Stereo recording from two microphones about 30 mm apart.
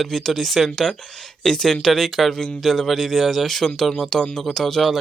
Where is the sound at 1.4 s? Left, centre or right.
Left.